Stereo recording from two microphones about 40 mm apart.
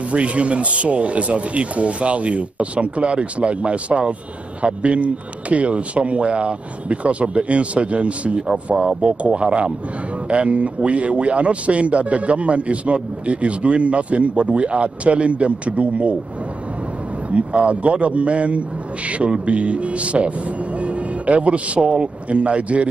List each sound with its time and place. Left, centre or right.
0.1 s a man's voice: right
17.3 s a man's voice: right